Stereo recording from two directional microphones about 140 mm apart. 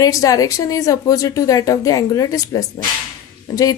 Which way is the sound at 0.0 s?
25° left (ahead or behind).